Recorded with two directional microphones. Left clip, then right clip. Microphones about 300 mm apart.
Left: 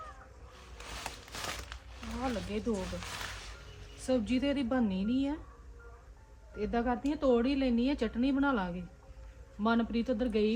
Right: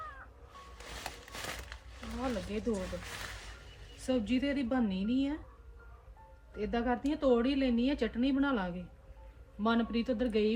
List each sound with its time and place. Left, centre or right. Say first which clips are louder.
0.9 s a sound: left 2 dB; centre
4.0 s speech: left 1 dB; centre
6.6 s speech: left 1 dB; centre